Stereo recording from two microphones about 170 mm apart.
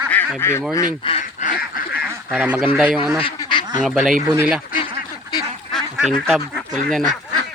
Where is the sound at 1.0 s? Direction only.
35° left (ahead or behind).